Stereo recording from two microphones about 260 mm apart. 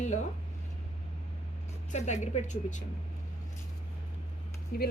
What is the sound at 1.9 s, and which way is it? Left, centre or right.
Speech, left.